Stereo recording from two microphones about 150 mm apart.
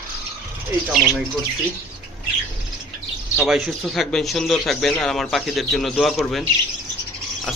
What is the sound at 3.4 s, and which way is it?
Speech, centre (ahead or behind).